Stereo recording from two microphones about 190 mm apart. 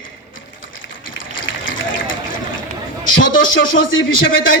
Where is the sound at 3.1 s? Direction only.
85° left.